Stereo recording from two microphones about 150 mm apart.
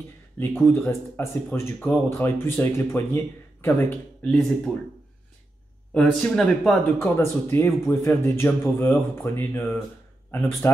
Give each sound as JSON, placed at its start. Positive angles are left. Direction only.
{"t": 0.4, "sound": "a man's voice", "side_deg": 15}
{"t": 5.9, "sound": "a man's voice", "side_deg": 5}
{"t": 7.0, "sound": "a man's voice", "side_deg": 15}